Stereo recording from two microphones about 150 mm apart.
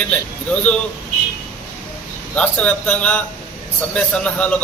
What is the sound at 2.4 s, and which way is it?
A man's voice, 10° left (ahead or behind).